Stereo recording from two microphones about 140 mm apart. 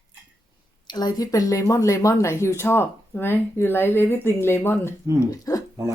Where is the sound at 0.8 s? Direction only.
30° left (ahead or behind).